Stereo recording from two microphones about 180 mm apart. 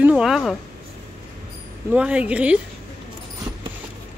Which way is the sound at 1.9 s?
5° right (ahead or behind).